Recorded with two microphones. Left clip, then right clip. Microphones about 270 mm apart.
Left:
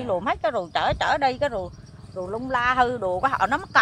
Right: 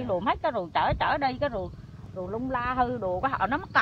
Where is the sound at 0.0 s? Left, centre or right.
Left.